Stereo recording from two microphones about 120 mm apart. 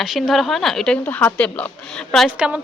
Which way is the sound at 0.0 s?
Centre (ahead or behind).